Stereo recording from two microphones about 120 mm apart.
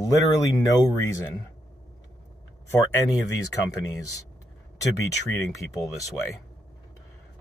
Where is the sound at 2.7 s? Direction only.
25° left (ahead or behind).